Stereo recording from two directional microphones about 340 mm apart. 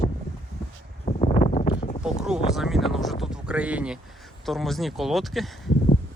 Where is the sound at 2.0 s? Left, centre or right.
Centre.